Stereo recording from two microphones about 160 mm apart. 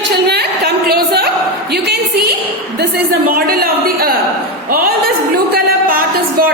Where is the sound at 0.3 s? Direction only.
90° right.